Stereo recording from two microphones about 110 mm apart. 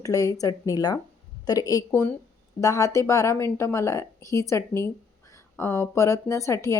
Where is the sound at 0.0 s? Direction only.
30° left (ahead or behind).